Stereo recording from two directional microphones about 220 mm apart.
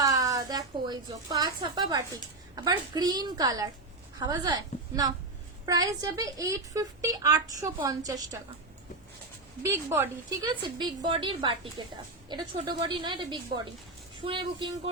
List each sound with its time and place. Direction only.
0.0 s a woman's voice: 15° right (ahead or behind)
9.6 s a woman's voice: 10° right (ahead or behind)